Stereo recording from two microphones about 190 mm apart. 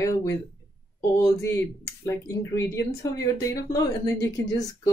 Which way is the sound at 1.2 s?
15° left (ahead or behind).